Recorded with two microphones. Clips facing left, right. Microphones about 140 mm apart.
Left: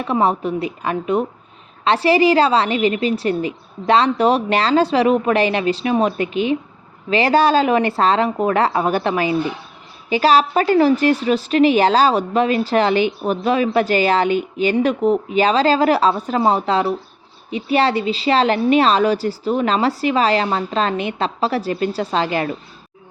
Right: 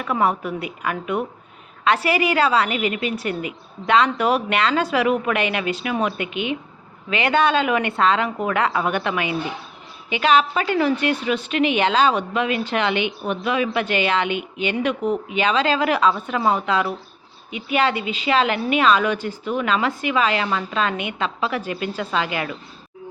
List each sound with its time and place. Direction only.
0.0 s a woman's voice: 25° left (ahead or behind)